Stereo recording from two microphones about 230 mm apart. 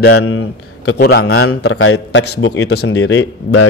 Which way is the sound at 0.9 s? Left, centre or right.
Left.